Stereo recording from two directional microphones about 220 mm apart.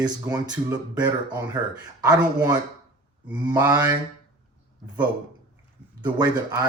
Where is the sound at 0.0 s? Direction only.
15° right (ahead or behind).